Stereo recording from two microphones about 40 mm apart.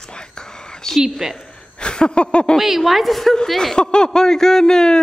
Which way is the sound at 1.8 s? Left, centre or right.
Left.